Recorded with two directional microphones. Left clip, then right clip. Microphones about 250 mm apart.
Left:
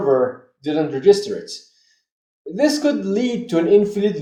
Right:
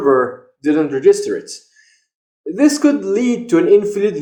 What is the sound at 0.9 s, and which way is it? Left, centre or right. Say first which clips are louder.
Speech: right 1 dB; right.